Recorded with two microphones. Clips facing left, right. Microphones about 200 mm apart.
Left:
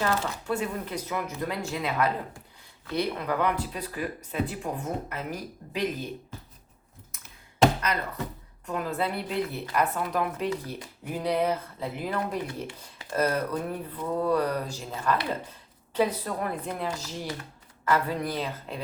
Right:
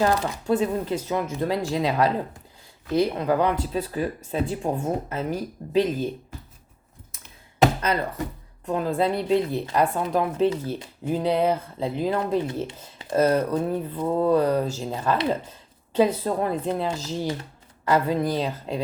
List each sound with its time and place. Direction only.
0.0 s speech: 35° right (ahead or behind)
3.2 s speech: 30° right (ahead or behind)
8.6 s speech: 30° right (ahead or behind)